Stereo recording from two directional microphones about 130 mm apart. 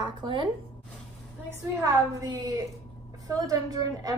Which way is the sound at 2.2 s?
30° right (ahead or behind).